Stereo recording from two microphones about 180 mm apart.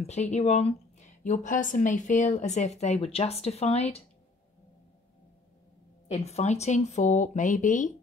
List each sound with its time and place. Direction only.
0.0 s a woman's voice: 35° left (ahead or behind)
6.0 s a woman's voice: 35° left (ahead or behind)